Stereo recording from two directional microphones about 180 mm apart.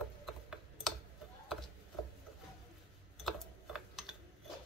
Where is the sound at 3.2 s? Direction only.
Centre (ahead or behind).